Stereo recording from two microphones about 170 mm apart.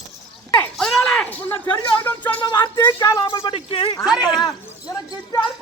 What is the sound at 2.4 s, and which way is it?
Speech, 20° left (ahead or behind).